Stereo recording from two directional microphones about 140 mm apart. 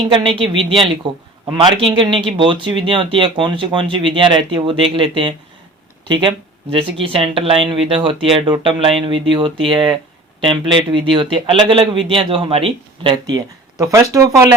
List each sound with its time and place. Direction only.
0.0 s speech: 40° right (ahead or behind)
13.7 s speech: 25° right (ahead or behind)